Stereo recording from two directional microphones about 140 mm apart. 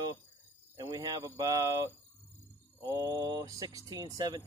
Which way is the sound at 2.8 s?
25° right (ahead or behind).